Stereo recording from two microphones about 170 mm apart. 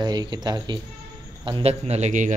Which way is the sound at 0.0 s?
25° right (ahead or behind).